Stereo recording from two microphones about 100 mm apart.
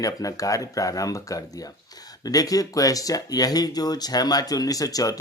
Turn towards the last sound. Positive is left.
turn(degrees=35)  # may be behind; listen again after turning